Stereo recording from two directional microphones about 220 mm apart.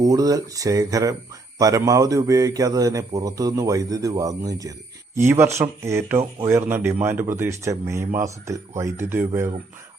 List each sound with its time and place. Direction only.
0.0 s speech: 15° right (ahead or behind)